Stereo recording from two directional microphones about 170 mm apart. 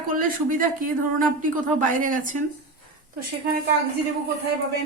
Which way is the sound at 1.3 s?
50° right (ahead or behind).